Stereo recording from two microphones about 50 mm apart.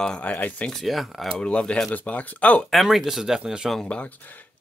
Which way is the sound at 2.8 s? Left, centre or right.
Centre.